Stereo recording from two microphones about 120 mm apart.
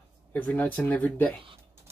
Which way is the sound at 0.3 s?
10° left (ahead or behind).